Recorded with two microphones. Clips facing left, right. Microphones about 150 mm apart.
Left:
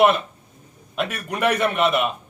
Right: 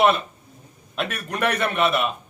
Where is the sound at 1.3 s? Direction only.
10° left (ahead or behind).